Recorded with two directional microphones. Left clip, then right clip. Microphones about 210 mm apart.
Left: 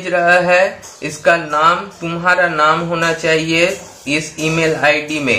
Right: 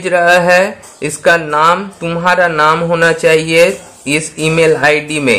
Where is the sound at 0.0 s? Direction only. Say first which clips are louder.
Right 3 dB; 50° right (ahead or behind).